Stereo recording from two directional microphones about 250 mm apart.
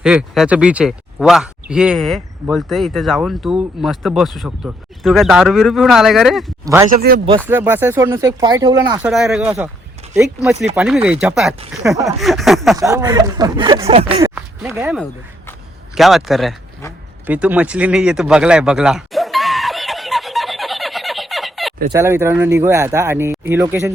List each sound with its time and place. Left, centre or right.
0.0 s speech: centre
6.9 s speech: right
7.4 s speech: centre
9.0 s speech: centre
12.7 s speech: centre
14.3 s speech: centre
16.0 s speech: centre
17.2 s a sound: centre
21.9 s speech: centre